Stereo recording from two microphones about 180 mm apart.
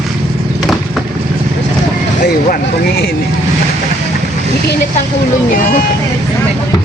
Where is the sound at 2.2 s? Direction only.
60° left (ahead or behind).